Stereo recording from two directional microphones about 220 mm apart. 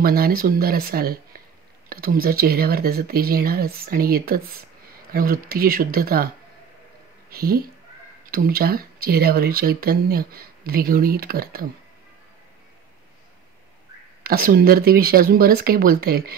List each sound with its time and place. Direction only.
0.0 s speech: 45° right (ahead or behind)
7.2 s speech: 45° right (ahead or behind)
14.2 s speech: 45° right (ahead or behind)